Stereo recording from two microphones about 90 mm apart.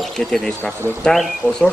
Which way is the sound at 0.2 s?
5° left (ahead or behind).